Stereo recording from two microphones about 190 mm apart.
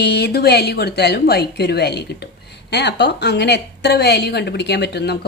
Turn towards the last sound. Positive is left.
turn(degrees=60)  # may be behind; listen again after turning